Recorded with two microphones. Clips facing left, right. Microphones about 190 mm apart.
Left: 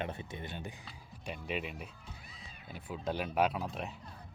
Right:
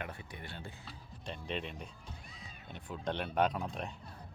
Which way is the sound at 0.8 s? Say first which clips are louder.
Left 1 dB; 10° left (ahead or behind).